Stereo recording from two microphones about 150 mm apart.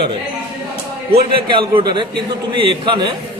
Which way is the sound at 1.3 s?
35° right (ahead or behind).